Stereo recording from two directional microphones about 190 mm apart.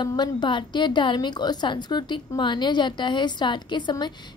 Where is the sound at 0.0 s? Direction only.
25° left (ahead or behind).